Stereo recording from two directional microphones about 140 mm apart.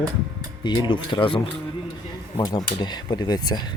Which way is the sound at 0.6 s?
35° left (ahead or behind).